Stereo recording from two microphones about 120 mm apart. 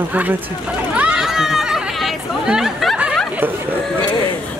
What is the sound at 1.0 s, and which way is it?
Chatter, 5° right (ahead or behind).